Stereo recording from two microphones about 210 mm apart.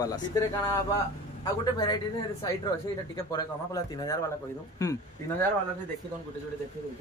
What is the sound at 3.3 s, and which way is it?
Speech, 15° left (ahead or behind).